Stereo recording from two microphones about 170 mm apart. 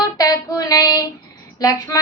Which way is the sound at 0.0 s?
20° left (ahead or behind).